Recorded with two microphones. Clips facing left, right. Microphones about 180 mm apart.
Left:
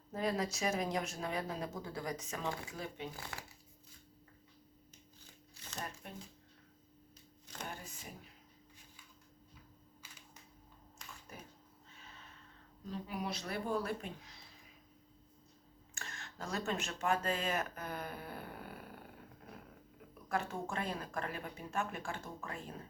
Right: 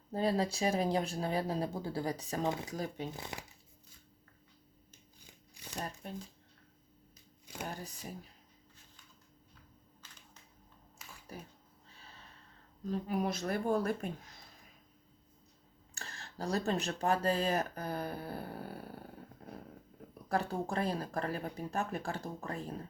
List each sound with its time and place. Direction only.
0.1 s speech: 30° right (ahead or behind)
3.1 s speech: 20° right (ahead or behind)
5.2 s shuffling cards: 15° right (ahead or behind)
6.0 s speech: 35° right (ahead or behind)
7.4 s a sound: 10° right (ahead or behind)
11.0 s typing: 5° right (ahead or behind)
11.9 s snort: 35° right (ahead or behind)
12.9 s speech: 45° right (ahead or behind)
16.0 s speech: 35° right (ahead or behind)
20.2 s speech: 35° right (ahead or behind)